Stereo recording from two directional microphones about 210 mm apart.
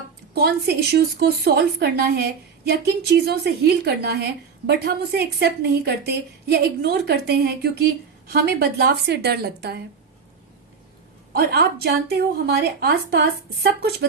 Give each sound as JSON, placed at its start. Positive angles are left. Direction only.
{"t": 0.3, "sound": "a woman's voice", "side_deg": -50}
{"t": 11.3, "sound": "a woman's voice", "side_deg": -50}